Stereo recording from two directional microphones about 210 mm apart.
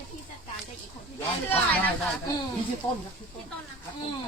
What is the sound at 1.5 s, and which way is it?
Speech, 10° left (ahead or behind).